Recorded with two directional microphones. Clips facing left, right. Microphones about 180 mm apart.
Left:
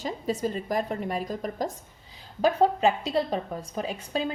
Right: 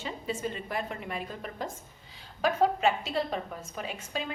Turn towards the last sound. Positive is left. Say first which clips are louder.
# left 6 dB
turn(degrees=35)  # may be behind; listen again after turning